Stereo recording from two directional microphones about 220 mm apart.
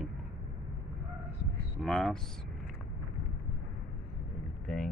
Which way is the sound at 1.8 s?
Centre (ahead or behind).